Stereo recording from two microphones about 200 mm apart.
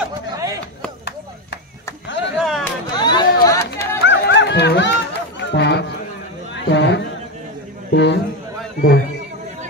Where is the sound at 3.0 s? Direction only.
20° left (ahead or behind).